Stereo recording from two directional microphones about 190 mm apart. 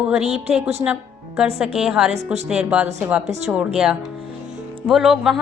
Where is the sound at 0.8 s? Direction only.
5° right (ahead or behind).